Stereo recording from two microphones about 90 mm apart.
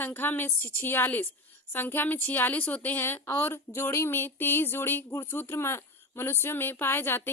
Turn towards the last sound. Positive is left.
turn(degrees=25)  # may be behind; listen again after turning